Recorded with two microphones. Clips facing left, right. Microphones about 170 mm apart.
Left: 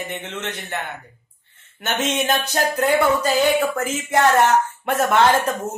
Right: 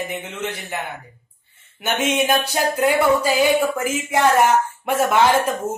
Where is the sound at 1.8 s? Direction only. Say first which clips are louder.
Right 2 dB; 10° right (ahead or behind).